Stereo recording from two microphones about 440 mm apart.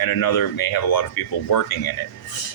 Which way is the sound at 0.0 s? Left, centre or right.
Left.